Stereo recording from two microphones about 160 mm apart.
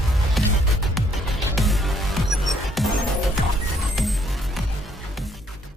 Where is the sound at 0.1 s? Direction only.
Centre (ahead or behind).